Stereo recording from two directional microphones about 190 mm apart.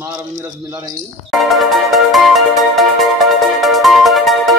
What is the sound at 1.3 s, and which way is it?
Music, centre (ahead or behind).